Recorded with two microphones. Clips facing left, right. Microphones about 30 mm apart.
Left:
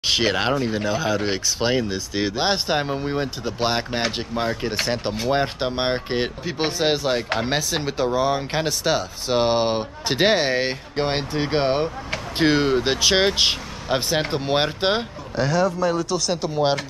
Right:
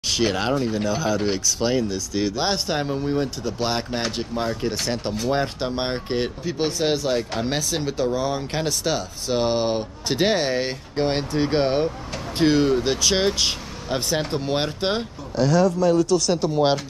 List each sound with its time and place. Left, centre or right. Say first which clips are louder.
0.0 s speech: left 2 dB; left; by 11.9 s centre
12.4 s speech: even; left; by 16.7 s centre